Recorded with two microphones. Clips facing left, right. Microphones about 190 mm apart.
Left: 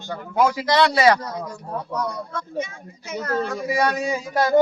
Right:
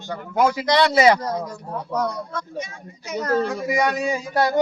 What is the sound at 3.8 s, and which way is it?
Speech, 15° right (ahead or behind).